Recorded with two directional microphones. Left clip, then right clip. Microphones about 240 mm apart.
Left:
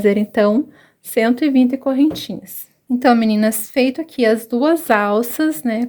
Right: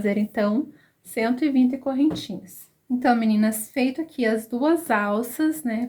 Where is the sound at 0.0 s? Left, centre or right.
Left.